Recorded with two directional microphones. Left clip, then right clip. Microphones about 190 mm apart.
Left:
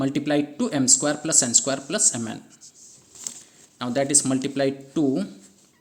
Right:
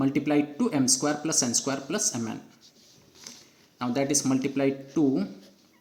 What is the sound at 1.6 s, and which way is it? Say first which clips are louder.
Speech: left 4 dB; 20° left (ahead or behind).